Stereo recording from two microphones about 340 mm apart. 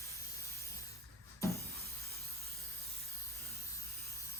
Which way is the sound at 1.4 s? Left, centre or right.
Centre.